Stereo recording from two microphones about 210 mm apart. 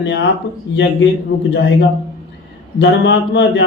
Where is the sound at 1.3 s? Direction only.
55° left (ahead or behind).